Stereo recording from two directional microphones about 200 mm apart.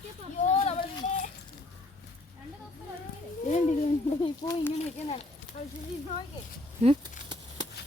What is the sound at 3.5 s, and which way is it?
Speech, 40° left (ahead or behind).